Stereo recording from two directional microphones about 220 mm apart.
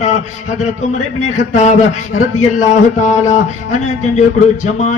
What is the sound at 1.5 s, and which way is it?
Speech, 30° left (ahead or behind).